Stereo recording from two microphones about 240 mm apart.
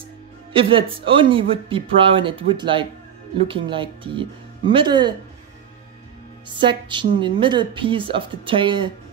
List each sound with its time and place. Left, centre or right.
0.5 s speech: right
6.6 s speech: centre